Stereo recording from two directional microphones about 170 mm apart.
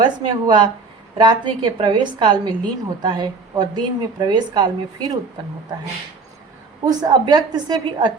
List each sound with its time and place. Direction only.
0.0 s a woman's voice: 25° right (ahead or behind)
6.8 s a woman's voice: 25° right (ahead or behind)